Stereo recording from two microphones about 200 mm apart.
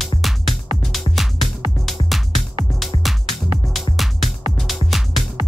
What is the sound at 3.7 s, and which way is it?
Music, centre (ahead or behind).